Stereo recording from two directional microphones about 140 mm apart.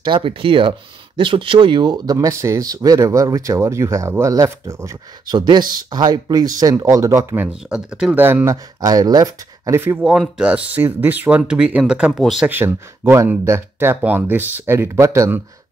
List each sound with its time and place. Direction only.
0.0 s speech: 35° right (ahead or behind); by 7.4 s 20° right (ahead or behind)
7.7 s speech: 5° right (ahead or behind)
10.0 s speech: 5° right (ahead or behind)
12.4 s speech: 15° right (ahead or behind)